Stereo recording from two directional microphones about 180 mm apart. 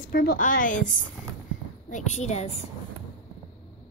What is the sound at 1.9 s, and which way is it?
Speech, 40° left (ahead or behind).